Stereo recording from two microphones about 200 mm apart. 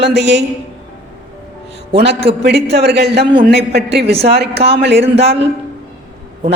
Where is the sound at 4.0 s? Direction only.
30° right (ahead or behind).